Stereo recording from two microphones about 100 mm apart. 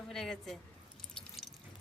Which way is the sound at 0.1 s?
5° left (ahead or behind).